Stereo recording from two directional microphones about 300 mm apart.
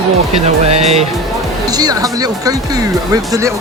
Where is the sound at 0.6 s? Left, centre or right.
Right.